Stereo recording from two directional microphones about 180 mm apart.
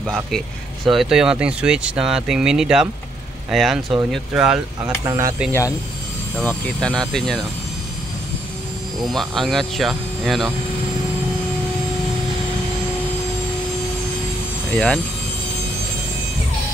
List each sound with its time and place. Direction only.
0.8 s speech: centre (ahead or behind)
5.0 s speech: 20° right (ahead or behind)
5.5 s speech: 15° left (ahead or behind)
6.3 s speech: 5° left (ahead or behind)
9.0 s speech: centre (ahead or behind)
14.7 s speech: 5° left (ahead or behind)